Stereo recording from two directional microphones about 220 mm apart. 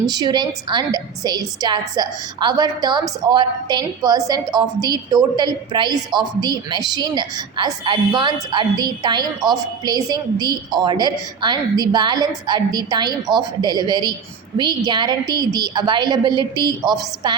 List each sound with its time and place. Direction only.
0.0 s a woman's voice: 20° right (ahead or behind)